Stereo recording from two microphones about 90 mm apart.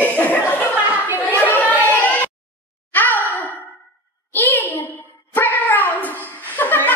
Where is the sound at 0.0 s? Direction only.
20° left (ahead or behind).